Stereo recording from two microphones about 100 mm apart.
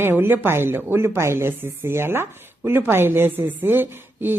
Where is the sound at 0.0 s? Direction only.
20° right (ahead or behind).